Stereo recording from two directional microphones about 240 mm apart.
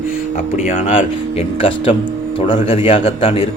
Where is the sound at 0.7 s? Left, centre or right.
Left.